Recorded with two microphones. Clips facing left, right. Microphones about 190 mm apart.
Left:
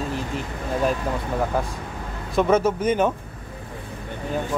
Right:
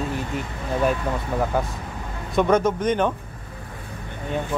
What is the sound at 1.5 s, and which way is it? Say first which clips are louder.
Speech: right 1 dB; centre (ahead or behind).